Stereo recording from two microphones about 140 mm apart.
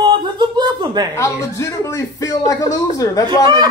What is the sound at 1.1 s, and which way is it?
Speech, 20° left (ahead or behind).